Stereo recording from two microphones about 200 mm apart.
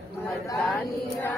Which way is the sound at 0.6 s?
10° left (ahead or behind).